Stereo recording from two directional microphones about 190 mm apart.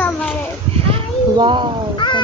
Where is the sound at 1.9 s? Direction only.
25° left (ahead or behind).